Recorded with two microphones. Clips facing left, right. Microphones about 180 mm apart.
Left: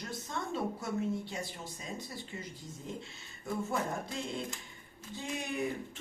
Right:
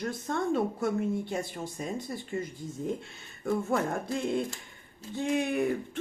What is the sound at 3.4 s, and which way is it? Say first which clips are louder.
Speech: right 6 dB; 55° right (ahead or behind).